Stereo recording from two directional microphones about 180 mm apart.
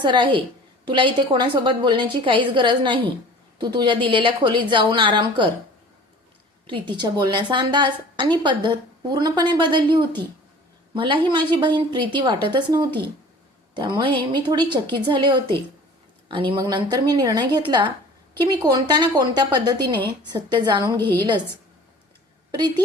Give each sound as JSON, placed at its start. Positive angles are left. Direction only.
{"t": 0.0, "sound": "a woman's voice", "side_deg": -25}
{"t": 6.7, "sound": "a woman's voice", "side_deg": -25}
{"t": 10.9, "sound": "a woman's voice", "side_deg": -25}
{"t": 21.0, "sound": "a woman's voice", "side_deg": 10}